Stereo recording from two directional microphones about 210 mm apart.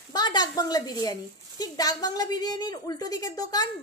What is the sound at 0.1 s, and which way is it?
A woman's voice, 20° left (ahead or behind).